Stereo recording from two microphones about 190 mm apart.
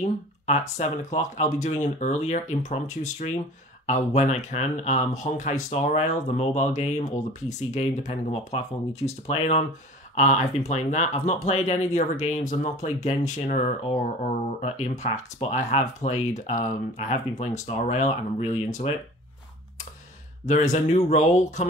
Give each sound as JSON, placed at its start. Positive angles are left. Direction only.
{"t": 0.5, "sound": "speech", "side_deg": 35}
{"t": 20.4, "sound": "speech", "side_deg": 40}